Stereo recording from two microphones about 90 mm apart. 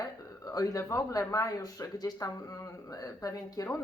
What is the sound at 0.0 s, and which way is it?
Speech, 40° left (ahead or behind).